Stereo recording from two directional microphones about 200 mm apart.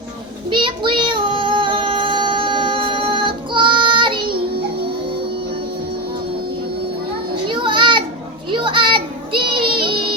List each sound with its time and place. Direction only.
0.5 s child singing: 25° right (ahead or behind)
7.4 s children playing: 25° right (ahead or behind)
8.4 s child singing: 25° right (ahead or behind)